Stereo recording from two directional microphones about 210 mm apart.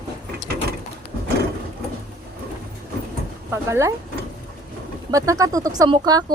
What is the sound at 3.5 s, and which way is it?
Speech, 15° right (ahead or behind).